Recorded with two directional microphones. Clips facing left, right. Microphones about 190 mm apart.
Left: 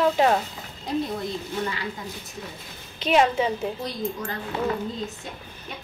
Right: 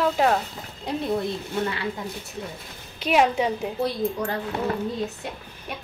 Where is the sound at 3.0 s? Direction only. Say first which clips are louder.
Even; 10° right (ahead or behind).